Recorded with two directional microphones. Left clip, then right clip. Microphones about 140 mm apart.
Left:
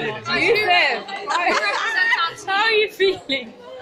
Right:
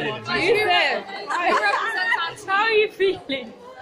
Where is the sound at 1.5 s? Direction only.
60° right (ahead or behind).